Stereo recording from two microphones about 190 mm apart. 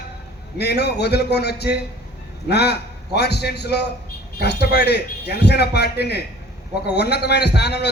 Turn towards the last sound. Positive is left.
turn(degrees=60)  # may be behind; listen again after turning